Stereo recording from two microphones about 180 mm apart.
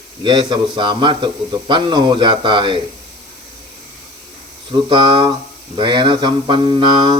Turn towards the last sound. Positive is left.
turn(degrees=-25)  # may be behind; listen again after turning